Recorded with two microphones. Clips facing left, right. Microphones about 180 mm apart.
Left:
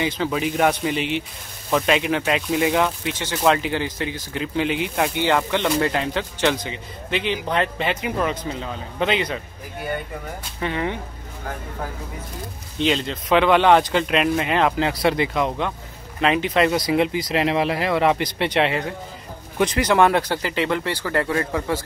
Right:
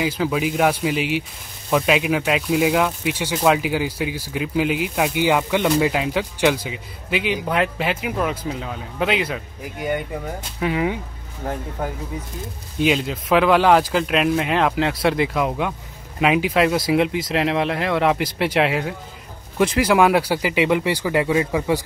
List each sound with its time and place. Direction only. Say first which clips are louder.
0.0 s speech: right 2 dB; 5° right (ahead or behind)
12.7 s speech: right 2 dB; 5° right (ahead or behind)